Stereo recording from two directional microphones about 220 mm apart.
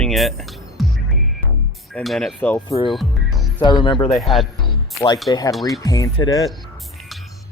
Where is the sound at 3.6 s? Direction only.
20° left (ahead or behind).